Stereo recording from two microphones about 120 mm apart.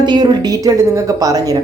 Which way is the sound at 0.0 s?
35° right (ahead or behind).